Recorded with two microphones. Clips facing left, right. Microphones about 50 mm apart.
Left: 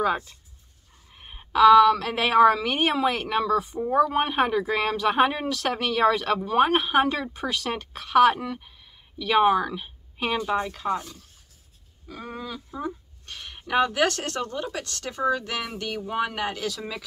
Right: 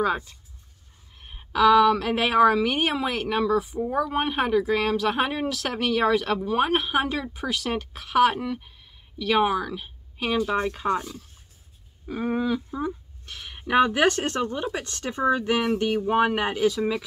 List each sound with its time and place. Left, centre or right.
0.0 s speech: centre
1.5 s speech: centre
10.8 s speech: right
12.1 s speech: right
13.2 s speech: centre